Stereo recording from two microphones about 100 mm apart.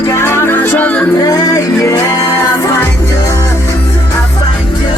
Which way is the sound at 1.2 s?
40° left (ahead or behind).